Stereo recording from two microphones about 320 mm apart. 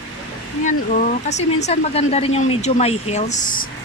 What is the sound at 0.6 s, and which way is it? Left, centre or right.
Speech, left.